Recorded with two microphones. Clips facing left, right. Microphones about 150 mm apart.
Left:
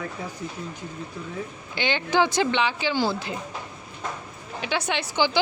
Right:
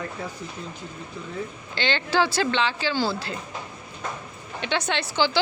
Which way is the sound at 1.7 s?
15° left (ahead or behind).